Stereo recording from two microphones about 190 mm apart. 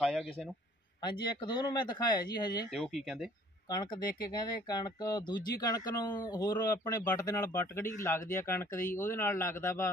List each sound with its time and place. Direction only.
1.0 s speech: 25° left (ahead or behind)
2.7 s speech: centre (ahead or behind)
3.7 s speech: 20° left (ahead or behind)